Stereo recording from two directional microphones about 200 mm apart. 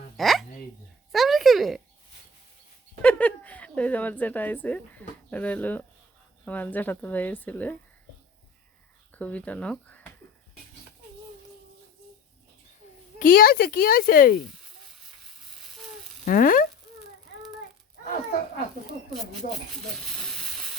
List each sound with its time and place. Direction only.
0.2 s hiccup: centre (ahead or behind)
1.1 s a sound: centre (ahead or behind)
3.0 s a woman's voice: 5° left (ahead or behind)
9.1 s speech: 5° left (ahead or behind)
13.1 s speech: 45° left (ahead or behind)
16.2 s sizzle: 45° left (ahead or behind)
20.1 s a sound: centre (ahead or behind)